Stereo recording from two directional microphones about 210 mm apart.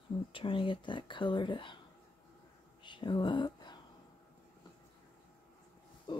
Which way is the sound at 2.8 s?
20° left (ahead or behind).